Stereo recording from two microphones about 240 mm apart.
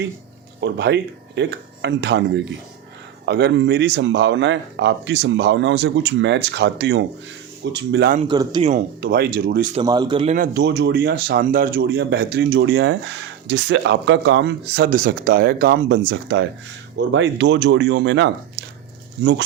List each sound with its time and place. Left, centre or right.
0.6 s speech: right
8.2 s a man's voice: centre
9.0 s speech: right
9.8 s a man's voice: centre
10.3 s speech: right